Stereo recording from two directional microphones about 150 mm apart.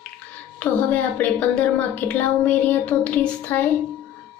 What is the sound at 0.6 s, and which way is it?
A woman's voice, 10° left (ahead or behind).